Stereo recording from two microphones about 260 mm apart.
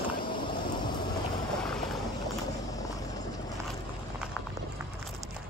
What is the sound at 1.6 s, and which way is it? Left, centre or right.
Boat, centre.